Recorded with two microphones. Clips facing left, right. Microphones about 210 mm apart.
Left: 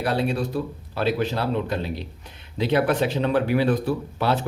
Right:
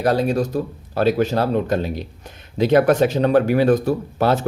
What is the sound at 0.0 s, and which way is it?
Speech, 40° right (ahead or behind).